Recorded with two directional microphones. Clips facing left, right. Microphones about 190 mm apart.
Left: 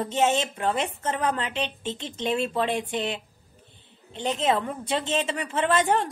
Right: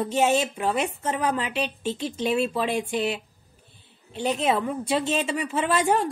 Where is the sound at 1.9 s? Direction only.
25° left (ahead or behind).